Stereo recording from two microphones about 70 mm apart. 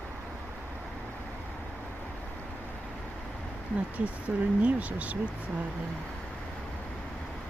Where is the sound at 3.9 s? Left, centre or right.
Right.